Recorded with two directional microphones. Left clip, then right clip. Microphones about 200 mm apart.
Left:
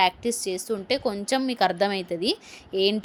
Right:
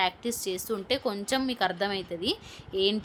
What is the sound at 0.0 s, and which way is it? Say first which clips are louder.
A woman's voice: left 6 dB; 15° left (ahead or behind).